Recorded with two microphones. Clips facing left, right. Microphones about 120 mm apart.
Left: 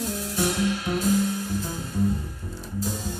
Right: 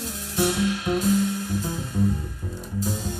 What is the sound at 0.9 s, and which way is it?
Music, 5° left (ahead or behind).